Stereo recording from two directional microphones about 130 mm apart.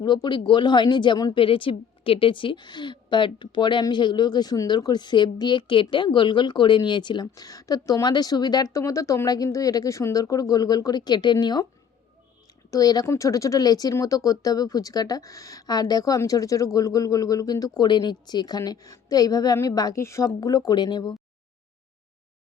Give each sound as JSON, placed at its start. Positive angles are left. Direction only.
{"t": 0.0, "sound": "speech", "side_deg": 35}
{"t": 12.7, "sound": "speech", "side_deg": 30}